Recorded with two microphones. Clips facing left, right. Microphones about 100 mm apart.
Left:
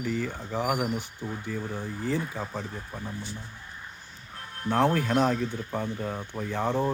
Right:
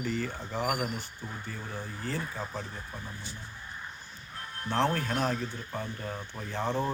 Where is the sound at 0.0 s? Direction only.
10° left (ahead or behind).